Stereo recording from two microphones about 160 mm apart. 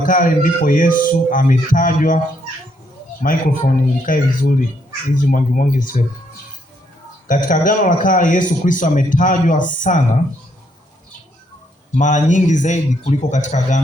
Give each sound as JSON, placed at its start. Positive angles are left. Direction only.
{"t": 0.0, "sound": "a man's voice", "side_deg": 55}
{"t": 3.2, "sound": "a man's voice", "side_deg": 55}
{"t": 7.3, "sound": "a man's voice", "side_deg": 55}
{"t": 11.9, "sound": "a man's voice", "side_deg": 50}